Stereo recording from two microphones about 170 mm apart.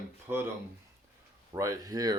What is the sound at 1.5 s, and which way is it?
Speech, 20° right (ahead or behind).